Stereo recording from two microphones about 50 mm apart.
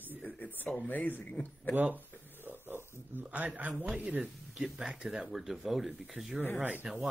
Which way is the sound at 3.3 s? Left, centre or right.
Right.